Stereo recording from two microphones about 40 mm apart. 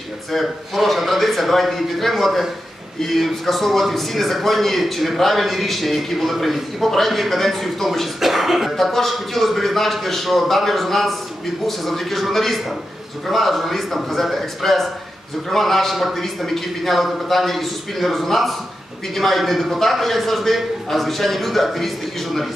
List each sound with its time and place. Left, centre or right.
0.3 s a man's voice: centre